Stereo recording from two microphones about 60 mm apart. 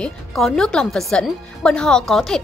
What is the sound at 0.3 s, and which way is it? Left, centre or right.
Speech, centre.